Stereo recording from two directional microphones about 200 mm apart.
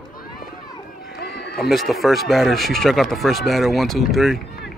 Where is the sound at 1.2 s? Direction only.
55° left (ahead or behind).